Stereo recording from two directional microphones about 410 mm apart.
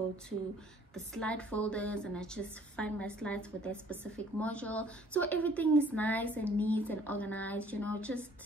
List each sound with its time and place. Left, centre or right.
0.9 s a woman's voice: centre